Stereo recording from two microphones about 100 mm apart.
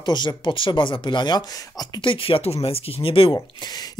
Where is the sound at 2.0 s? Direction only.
60° left (ahead or behind).